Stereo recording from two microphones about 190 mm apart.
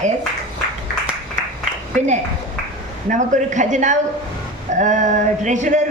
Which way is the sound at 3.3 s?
40° right (ahead or behind).